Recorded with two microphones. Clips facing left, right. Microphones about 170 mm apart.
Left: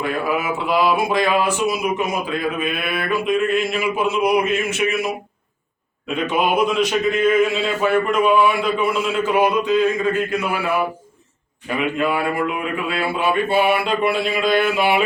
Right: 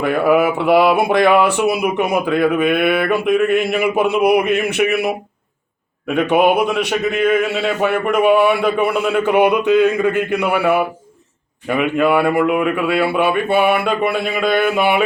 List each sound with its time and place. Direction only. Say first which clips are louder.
0.0 s speech: right 8 dB; 65° right (ahead or behind)
6.1 s a man's voice: right 5 dB; 65° right (ahead or behind)